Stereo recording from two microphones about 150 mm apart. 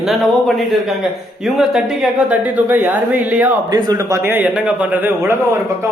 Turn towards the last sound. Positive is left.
turn(degrees=-15)  # may be behind; listen again after turning